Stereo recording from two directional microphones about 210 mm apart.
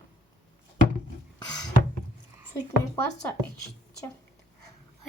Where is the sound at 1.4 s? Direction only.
20° left (ahead or behind).